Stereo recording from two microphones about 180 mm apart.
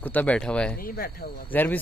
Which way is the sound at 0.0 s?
10° left (ahead or behind).